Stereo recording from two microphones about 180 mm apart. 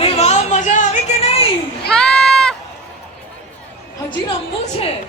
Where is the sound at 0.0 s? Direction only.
35° left (ahead or behind).